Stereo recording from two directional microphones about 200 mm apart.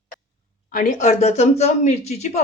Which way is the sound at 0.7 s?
40° left (ahead or behind).